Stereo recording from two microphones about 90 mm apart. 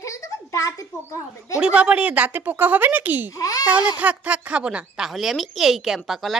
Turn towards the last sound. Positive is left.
turn(degrees=0)  # may be behind; listen again after turning